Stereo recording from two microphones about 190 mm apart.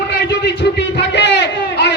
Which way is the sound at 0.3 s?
65° left (ahead or behind).